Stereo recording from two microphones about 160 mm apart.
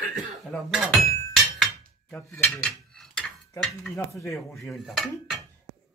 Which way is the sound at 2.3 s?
5° left (ahead or behind).